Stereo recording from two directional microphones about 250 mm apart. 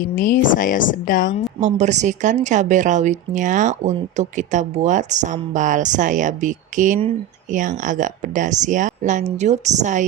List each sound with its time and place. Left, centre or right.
0.0 s a woman's voice: left
1.6 s a woman's voice: right